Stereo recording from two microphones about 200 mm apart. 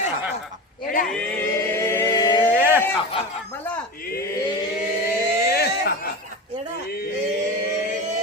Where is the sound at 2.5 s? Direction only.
10° right (ahead or behind).